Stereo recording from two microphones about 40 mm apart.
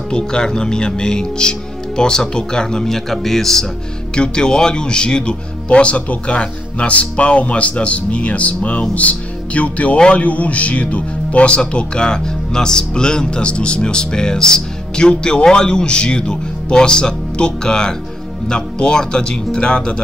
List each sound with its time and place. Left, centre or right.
0.1 s speech: centre
4.1 s speech: left